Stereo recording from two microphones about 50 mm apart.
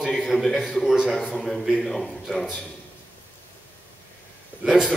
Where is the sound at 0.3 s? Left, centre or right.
Centre.